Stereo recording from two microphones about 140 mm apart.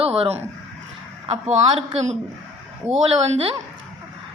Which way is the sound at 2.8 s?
15° right (ahead or behind).